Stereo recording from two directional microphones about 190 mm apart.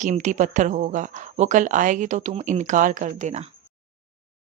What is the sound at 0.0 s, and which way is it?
Speech, 40° right (ahead or behind).